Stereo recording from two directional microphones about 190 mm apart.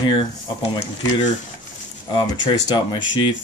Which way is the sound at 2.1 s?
20° left (ahead or behind).